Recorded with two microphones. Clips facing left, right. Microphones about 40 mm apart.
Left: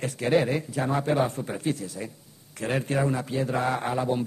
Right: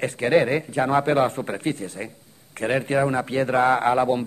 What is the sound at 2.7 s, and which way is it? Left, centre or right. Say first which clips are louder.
Speech: right 4 dB; right.